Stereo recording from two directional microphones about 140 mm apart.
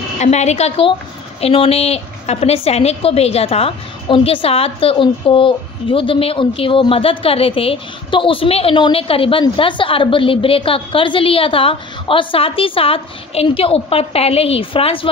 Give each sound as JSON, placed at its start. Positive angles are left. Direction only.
{"t": 0.2, "sound": "a woman's voice", "side_deg": 55}